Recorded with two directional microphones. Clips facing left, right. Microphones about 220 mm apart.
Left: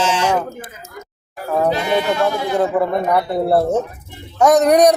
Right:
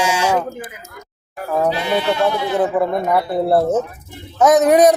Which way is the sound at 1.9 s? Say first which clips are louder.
Even; 45° left (ahead or behind).